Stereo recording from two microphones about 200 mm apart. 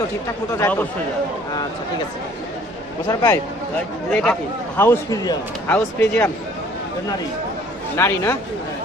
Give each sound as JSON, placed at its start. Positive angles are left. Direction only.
{"t": 0.6, "sound": "a man's voice", "side_deg": 10}
{"t": 3.1, "sound": "a man's voice", "side_deg": 20}
{"t": 4.1, "sound": "a man's voice", "side_deg": 5}
{"t": 7.9, "sound": "a man's voice", "side_deg": 15}